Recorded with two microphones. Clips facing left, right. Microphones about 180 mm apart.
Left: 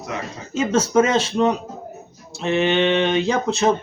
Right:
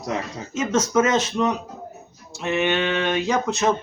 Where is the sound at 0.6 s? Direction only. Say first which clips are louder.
Left 3 dB; 30° left (ahead or behind).